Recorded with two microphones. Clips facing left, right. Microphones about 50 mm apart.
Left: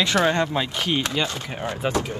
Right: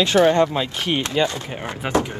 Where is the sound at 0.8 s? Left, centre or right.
Right.